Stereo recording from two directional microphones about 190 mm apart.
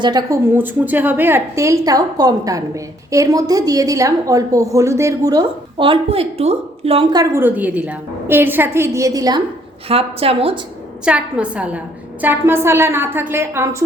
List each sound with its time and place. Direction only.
0.0 s a woman's voice: 20° right (ahead or behind)
9.9 s a woman's voice: 30° right (ahead or behind)
11.0 s a woman's voice: 5° right (ahead or behind)